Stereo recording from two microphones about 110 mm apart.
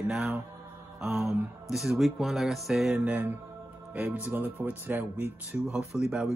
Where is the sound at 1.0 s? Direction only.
20° right (ahead or behind).